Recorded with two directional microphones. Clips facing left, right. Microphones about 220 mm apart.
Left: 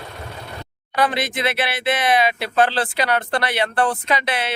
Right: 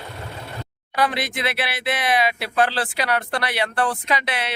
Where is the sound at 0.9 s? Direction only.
Centre (ahead or behind).